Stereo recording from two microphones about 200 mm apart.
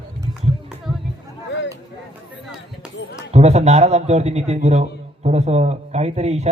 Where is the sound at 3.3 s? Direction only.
35° right (ahead or behind).